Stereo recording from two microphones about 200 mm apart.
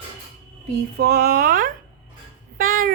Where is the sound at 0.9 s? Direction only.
55° right (ahead or behind).